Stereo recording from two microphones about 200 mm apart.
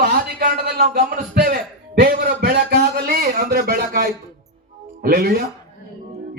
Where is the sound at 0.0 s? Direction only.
50° right (ahead or behind).